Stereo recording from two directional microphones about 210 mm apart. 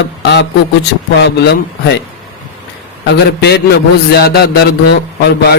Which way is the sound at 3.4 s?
50° left (ahead or behind).